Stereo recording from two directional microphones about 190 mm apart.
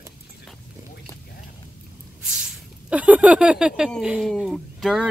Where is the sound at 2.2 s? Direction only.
5° right (ahead or behind).